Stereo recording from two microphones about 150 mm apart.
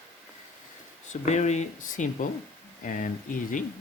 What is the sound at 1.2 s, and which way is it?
Speech, 50° left (ahead or behind).